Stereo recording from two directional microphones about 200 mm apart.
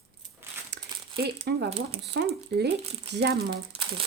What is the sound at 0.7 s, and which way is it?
Crumpling, 55° right (ahead or behind).